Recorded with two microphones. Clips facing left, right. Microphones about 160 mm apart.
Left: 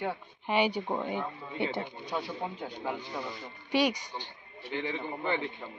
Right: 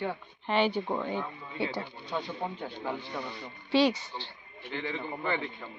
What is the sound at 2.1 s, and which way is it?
A man's voice, 10° left (ahead or behind).